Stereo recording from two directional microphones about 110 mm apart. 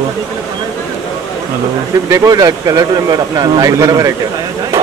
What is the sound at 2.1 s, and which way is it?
Speech, 30° right (ahead or behind).